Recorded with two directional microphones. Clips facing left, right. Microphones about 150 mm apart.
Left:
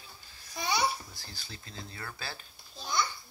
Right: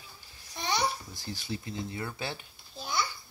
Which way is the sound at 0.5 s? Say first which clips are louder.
Even; 5° left (ahead or behind).